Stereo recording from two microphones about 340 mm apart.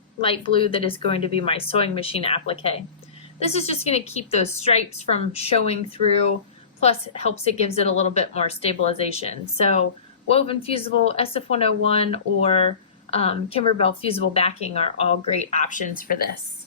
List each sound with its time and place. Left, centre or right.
0.2 s speech: centre
6.8 s speech: centre